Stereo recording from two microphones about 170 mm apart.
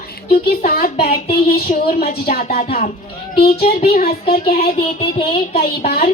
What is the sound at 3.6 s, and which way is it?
A woman's voice, 60° left (ahead or behind).